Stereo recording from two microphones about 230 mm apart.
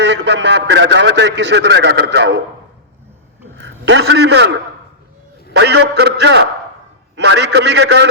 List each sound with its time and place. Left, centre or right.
0.0 s a man's voice: right
3.6 s a man's voice: right
5.5 s a man's voice: right